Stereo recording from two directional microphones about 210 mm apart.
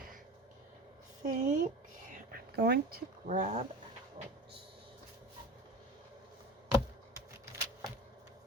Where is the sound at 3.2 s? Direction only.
35° right (ahead or behind).